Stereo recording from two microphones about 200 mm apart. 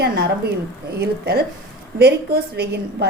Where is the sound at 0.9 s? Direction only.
55° right (ahead or behind).